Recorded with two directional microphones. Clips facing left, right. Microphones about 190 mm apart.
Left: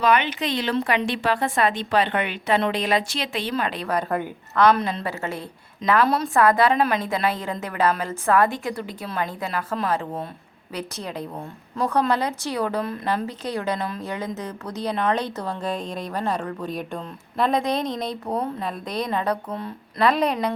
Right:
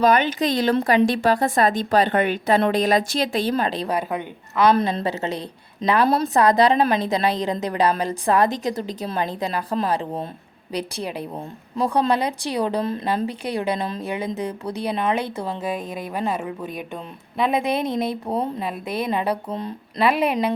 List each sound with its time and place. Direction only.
0.0 s a woman's voice: 40° right (ahead or behind)
4.1 s a woman's voice: centre (ahead or behind)
4.7 s a woman's voice: 30° right (ahead or behind)
6.1 s a woman's voice: 30° right (ahead or behind)
6.3 s a woman's voice: 20° right (ahead or behind)
6.7 s a woman's voice: 30° right (ahead or behind)
7.3 s a woman's voice: 15° right (ahead or behind)
19.5 s a woman's voice: 20° right (ahead or behind)
20.0 s a woman's voice: 10° right (ahead or behind)